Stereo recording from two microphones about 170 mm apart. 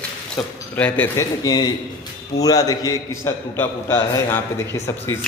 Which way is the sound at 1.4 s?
25° left (ahead or behind).